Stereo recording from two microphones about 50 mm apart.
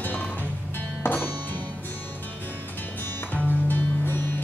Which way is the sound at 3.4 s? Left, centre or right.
Left.